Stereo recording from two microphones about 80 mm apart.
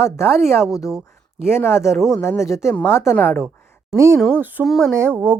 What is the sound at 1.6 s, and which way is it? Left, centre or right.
Speech, left.